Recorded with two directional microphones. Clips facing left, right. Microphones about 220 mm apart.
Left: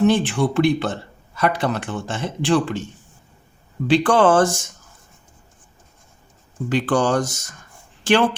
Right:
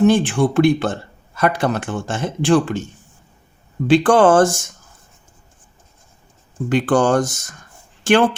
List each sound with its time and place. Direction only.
0.0 s speech: 50° right (ahead or behind)
3.8 s speech: 50° right (ahead or behind)
6.7 s speech: 50° right (ahead or behind)